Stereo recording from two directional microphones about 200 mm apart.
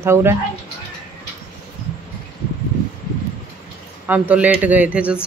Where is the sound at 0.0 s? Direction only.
10° right (ahead or behind).